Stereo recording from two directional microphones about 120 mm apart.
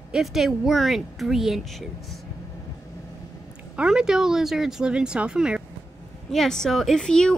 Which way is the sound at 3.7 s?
5° right (ahead or behind).